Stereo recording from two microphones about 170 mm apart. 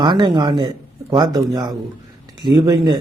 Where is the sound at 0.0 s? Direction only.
25° right (ahead or behind).